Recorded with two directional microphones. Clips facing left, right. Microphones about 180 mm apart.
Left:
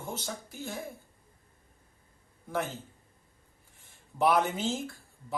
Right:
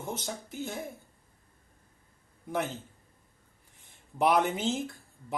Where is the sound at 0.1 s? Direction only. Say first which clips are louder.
Right 1 dB; 20° right (ahead or behind).